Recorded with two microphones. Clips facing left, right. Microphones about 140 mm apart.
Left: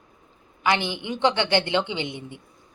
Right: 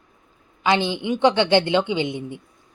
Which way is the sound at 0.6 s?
20° right (ahead or behind).